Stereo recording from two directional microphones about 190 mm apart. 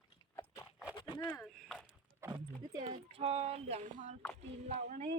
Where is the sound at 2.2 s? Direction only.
20° right (ahead or behind); by 5.1 s 35° right (ahead or behind).